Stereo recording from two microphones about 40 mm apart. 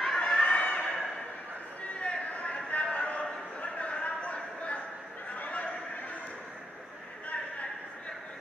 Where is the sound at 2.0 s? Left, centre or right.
Left.